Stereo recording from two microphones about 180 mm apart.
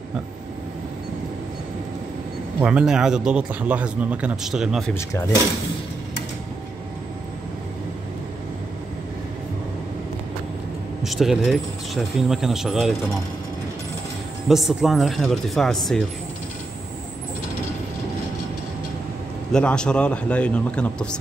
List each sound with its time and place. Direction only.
2.6 s speech: 5° right (ahead or behind)
4.9 s speech: 20° left (ahead or behind)
11.1 s speech: centre (ahead or behind)
14.5 s speech: centre (ahead or behind)
19.5 s speech: 5° left (ahead or behind)